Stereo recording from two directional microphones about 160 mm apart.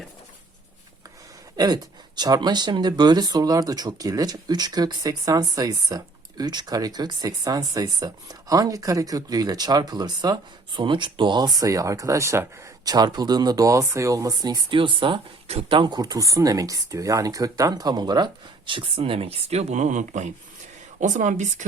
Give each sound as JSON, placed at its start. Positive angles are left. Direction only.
{"t": 1.5, "sound": "speech", "side_deg": -25}